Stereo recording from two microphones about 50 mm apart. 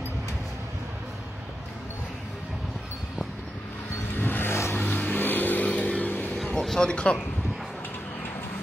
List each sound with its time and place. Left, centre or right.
4.2 s vehicle: left
4.7 s a sound: left
5.2 s vehicle: left
6.6 s speech: centre